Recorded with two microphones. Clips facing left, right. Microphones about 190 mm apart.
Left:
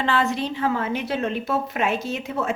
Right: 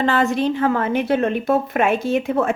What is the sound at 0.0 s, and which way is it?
A woman's voice, 45° right (ahead or behind).